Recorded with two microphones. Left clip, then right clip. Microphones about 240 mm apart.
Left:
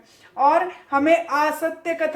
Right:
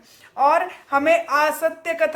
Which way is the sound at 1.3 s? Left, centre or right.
Right.